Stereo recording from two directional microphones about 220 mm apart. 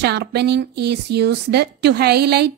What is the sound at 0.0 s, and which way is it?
Speech, 50° right (ahead or behind).